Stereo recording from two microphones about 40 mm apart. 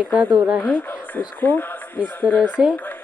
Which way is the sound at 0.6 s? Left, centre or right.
Left.